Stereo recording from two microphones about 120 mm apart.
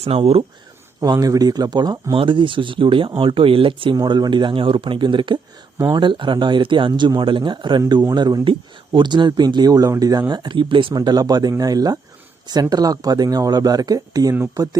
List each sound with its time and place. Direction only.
0.0 s speech: 55° right (ahead or behind)
1.0 s speech: 30° right (ahead or behind)